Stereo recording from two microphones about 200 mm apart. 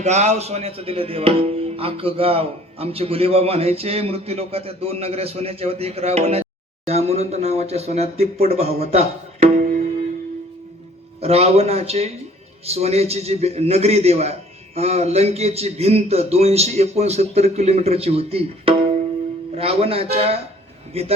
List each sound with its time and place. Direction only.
0.0 s speech: 35° right (ahead or behind)
11.2 s a man's voice: 30° right (ahead or behind)